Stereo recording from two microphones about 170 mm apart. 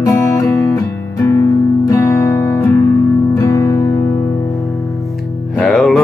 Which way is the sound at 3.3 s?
20° left (ahead or behind).